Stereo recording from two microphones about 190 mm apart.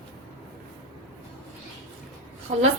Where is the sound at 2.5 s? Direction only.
35° right (ahead or behind).